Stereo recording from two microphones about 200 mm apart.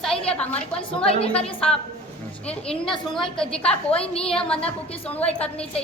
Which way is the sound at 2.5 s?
5° left (ahead or behind).